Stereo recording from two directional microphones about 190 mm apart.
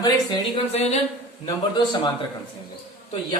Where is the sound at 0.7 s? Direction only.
35° left (ahead or behind).